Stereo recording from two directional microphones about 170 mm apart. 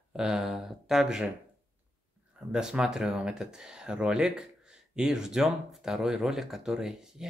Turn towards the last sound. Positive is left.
turn(degrees=-5)  # may be behind; listen again after turning